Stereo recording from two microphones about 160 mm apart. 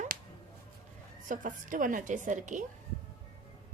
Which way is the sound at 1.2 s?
55° right (ahead or behind).